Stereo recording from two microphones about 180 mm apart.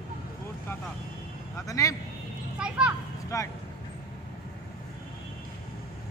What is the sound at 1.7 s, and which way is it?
Vehicle, 20° left (ahead or behind).